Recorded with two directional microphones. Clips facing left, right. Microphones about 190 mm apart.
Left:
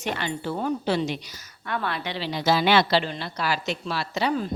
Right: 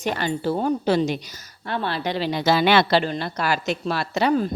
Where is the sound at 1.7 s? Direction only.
30° right (ahead or behind); by 4.5 s 50° right (ahead or behind).